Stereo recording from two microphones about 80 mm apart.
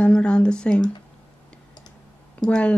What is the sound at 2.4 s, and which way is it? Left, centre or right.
Speech, centre.